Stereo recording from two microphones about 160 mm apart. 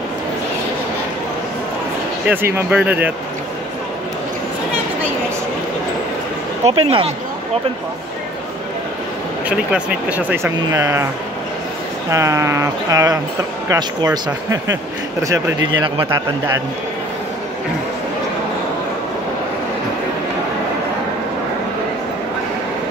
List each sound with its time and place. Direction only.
2.2 s speech: 15° right (ahead or behind)
6.6 s speech: 35° right (ahead or behind)
9.5 s speech: 5° right (ahead or behind)
12.1 s speech: 20° right (ahead or behind)
16.1 s speech: 20° right (ahead or behind)